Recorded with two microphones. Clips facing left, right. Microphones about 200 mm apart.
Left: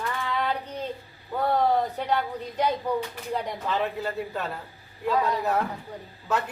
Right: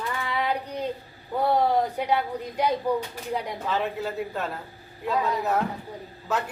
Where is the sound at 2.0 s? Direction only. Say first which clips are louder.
Right 2 dB; 10° right (ahead or behind).